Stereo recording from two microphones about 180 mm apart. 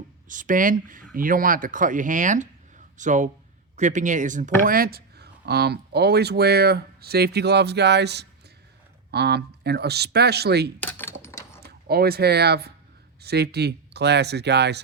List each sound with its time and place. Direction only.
0.3 s speech: 45° right (ahead or behind); by 10.7 s 65° right (ahead or behind)
10.8 s typing: 10° left (ahead or behind)
11.6 s speech: 60° right (ahead or behind)